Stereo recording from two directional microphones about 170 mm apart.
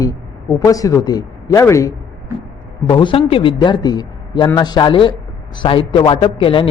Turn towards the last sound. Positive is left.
turn(degrees=30)  # may be behind; listen again after turning